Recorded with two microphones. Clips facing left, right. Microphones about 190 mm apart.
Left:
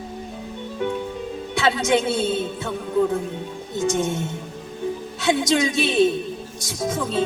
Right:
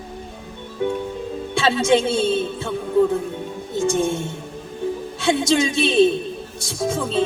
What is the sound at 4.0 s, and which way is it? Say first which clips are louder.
Music: right 2 dB; 25° right (ahead or behind).